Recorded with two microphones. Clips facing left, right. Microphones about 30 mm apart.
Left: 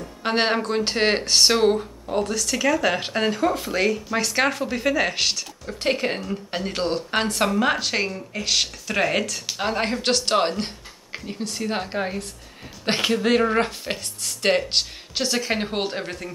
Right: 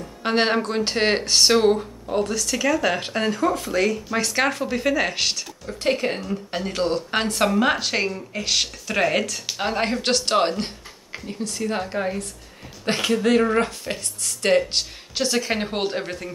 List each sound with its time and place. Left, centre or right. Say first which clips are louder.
0.2 s speech: right 1 dB; centre
7.1 s speech: right 1 dB; centre
11.1 s speech: even; centre